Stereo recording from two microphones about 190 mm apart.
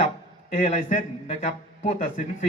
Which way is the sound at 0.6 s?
35° left (ahead or behind).